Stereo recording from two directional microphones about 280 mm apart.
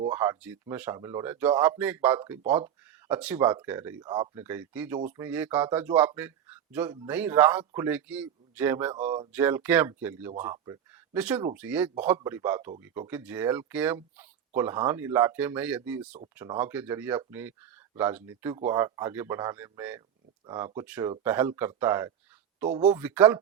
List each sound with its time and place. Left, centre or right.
0.1 s speech: centre
8.9 s speech: right
9.3 s speech: centre